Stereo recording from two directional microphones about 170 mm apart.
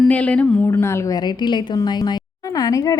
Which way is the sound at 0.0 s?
10° left (ahead or behind).